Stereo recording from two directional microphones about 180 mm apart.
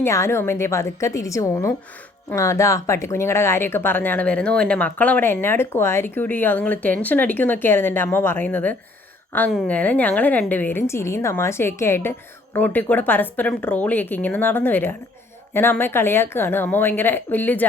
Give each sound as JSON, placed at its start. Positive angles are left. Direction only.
{"t": 0.0, "sound": "speech", "side_deg": 15}